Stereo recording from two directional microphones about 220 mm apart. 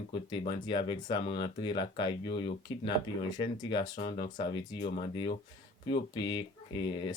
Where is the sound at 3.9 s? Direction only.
40° left (ahead or behind).